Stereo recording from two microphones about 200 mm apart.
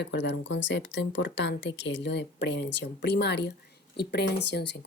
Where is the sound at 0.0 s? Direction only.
60° left (ahead or behind).